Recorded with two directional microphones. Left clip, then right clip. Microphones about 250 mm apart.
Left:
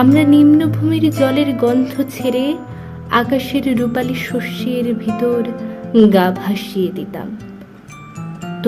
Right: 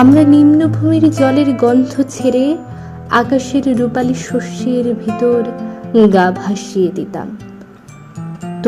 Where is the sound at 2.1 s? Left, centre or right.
Centre.